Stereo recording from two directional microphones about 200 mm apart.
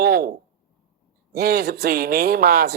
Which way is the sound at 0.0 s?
50° right (ahead or behind).